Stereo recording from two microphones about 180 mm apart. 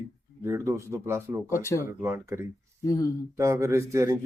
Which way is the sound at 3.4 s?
15° right (ahead or behind).